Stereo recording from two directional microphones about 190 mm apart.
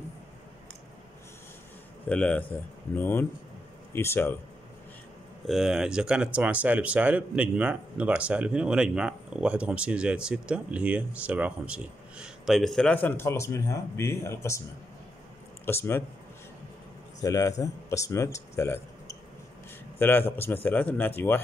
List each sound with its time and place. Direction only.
2.0 s speech: 5° left (ahead or behind)
5.5 s speech: centre (ahead or behind); by 14.6 s 15° left (ahead or behind)
15.6 s speech: 10° left (ahead or behind)
17.2 s speech: 15° left (ahead or behind)
20.0 s speech: 10° left (ahead or behind)